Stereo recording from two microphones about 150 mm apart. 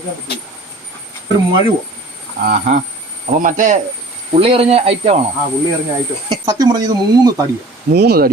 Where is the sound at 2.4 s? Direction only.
65° right (ahead or behind).